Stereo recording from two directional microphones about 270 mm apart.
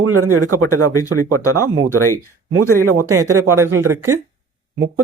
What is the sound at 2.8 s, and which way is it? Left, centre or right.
Speech, right.